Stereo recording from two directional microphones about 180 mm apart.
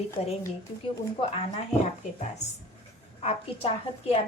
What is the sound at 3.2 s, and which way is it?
Speech, 35° left (ahead or behind).